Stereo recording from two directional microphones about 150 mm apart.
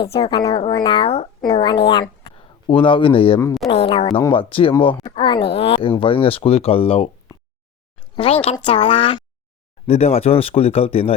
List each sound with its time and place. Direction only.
0.1 s speech: 25° left (ahead or behind)
1.0 s speech: 45° left (ahead or behind)
1.5 s speech: 30° left (ahead or behind)
8.1 s speech: 40° left (ahead or behind)